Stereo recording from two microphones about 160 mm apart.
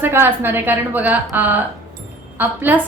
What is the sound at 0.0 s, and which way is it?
A woman's voice, 15° right (ahead or behind).